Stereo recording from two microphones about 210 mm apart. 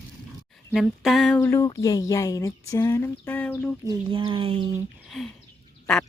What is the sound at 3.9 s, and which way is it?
Speech, 20° right (ahead or behind).